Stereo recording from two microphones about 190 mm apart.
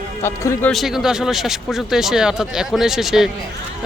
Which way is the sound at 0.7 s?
Centre (ahead or behind).